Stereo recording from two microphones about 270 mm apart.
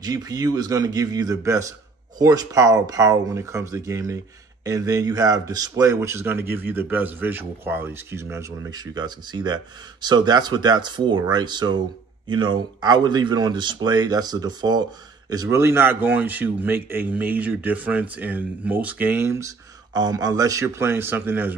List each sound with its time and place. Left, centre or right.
0.0 s speech: centre